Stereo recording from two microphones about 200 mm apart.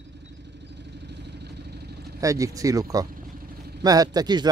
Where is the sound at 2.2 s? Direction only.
15° right (ahead or behind).